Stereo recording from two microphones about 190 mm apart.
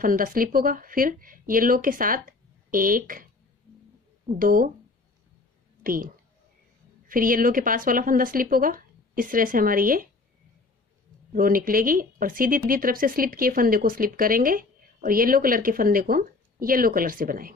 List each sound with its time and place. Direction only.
0.0 s speech: 45° right (ahead or behind)
4.4 s speech: 45° right (ahead or behind)
7.1 s speech: 45° right (ahead or behind)
11.3 s speech: 50° right (ahead or behind)